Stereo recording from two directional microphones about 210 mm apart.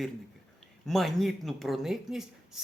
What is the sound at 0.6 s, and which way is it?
Speech, centre (ahead or behind).